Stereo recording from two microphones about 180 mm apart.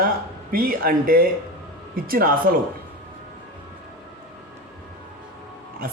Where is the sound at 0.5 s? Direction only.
55° right (ahead or behind).